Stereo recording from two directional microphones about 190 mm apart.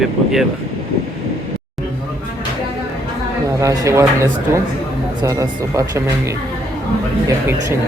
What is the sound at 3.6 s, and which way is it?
Speech, 15° right (ahead or behind).